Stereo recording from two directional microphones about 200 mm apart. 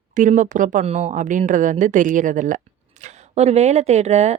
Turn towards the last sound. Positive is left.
turn(degrees=-35)  # may be behind; listen again after turning